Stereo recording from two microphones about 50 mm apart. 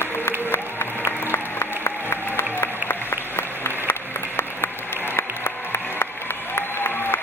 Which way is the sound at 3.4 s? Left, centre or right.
Left.